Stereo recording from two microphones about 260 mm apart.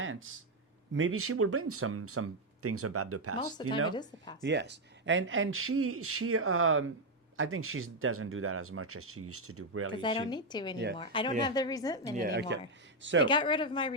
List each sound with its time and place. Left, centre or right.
0.0 s a sound: right
0.9 s speech: right
3.6 s speech: centre
4.4 s speech: right
9.9 s speech: centre
12.3 s speech: right
13.2 s speech: centre